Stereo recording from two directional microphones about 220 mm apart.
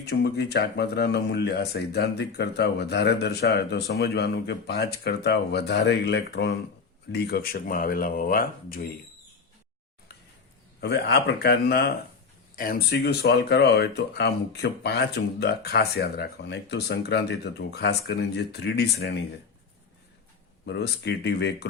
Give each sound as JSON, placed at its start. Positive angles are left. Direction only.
{"t": 0.0, "sound": "speech", "side_deg": 50}
{"t": 10.8, "sound": "speech", "side_deg": 50}
{"t": 20.7, "sound": "speech", "side_deg": 50}